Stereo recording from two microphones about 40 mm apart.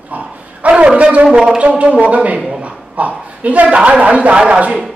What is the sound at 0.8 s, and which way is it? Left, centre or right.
A man's voice, right.